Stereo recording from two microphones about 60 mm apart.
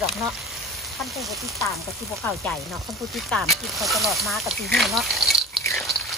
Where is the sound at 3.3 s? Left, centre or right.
Centre.